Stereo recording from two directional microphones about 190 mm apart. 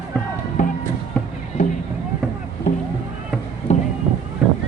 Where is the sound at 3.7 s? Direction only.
35° left (ahead or behind).